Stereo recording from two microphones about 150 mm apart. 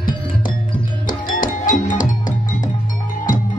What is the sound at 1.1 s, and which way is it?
Music, 60° left (ahead or behind).